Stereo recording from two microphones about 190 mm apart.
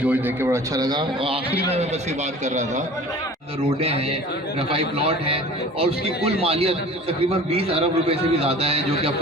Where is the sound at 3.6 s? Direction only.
30° right (ahead or behind).